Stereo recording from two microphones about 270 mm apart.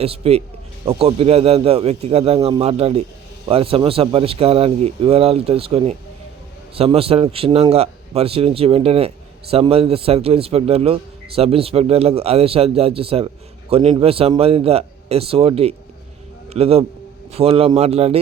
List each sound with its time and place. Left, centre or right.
0.0 s a man's voice: right